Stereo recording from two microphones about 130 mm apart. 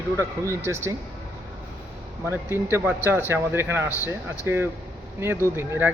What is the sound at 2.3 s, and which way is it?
Speech, 20° right (ahead or behind).